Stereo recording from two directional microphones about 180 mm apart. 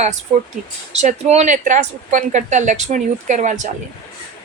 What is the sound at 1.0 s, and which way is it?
A woman's voice, 40° right (ahead or behind).